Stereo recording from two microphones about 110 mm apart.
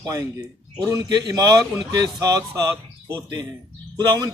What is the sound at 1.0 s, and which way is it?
Speech, 35° right (ahead or behind).